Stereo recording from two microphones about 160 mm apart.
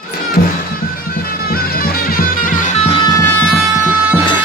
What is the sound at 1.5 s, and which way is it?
Music, 70° left (ahead or behind).